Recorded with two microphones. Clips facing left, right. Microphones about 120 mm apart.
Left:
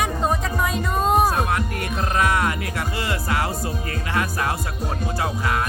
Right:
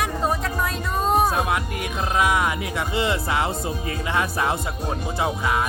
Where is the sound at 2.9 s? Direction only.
20° right (ahead or behind).